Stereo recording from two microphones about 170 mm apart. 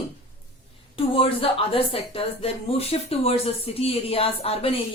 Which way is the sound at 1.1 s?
35° left (ahead or behind).